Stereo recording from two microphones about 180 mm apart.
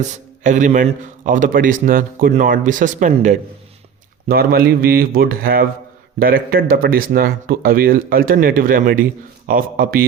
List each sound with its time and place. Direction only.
0.0 s speech: 45° right (ahead or behind)
4.3 s speech: 55° right (ahead or behind)